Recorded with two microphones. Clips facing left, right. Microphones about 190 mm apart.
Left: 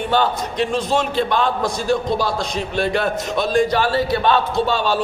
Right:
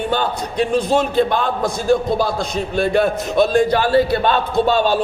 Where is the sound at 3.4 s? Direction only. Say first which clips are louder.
Right 3 dB; 50° right (ahead or behind).